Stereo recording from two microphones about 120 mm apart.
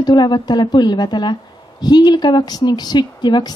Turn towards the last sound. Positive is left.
turn(degrees=35)  # may be behind; listen again after turning